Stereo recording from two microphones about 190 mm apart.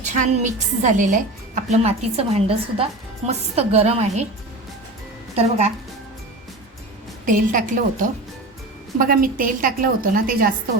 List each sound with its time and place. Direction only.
0.0 s a woman's voice: 40° right (ahead or behind)
5.4 s a woman's voice: 35° right (ahead or behind)
7.3 s a woman's voice: 45° right (ahead or behind)